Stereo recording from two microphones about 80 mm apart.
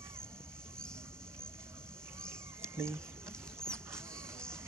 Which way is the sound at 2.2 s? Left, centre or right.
Right.